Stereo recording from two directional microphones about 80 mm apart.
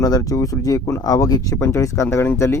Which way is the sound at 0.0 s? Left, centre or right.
Left.